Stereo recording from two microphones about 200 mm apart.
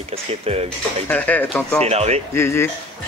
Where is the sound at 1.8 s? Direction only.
30° right (ahead or behind).